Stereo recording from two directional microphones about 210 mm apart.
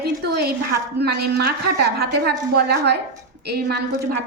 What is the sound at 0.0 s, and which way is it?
A woman's voice, 50° right (ahead or behind).